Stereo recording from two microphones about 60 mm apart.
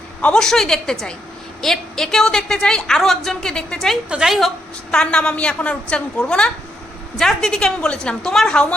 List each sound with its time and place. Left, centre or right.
0.3 s a woman's voice: centre
4.1 s a woman's voice: centre
4.9 s a woman's voice: centre